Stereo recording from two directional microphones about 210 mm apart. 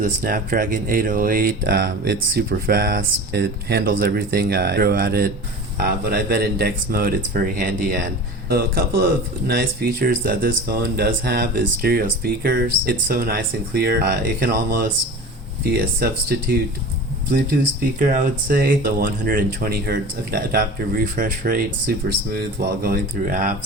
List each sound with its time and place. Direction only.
0.0 s speech: 45° right (ahead or behind)
16.0 s speech: 45° right (ahead or behind)
18.0 s speech: 40° right (ahead or behind)